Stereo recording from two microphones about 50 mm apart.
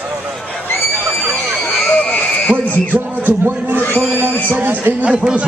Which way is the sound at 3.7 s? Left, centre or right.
Left.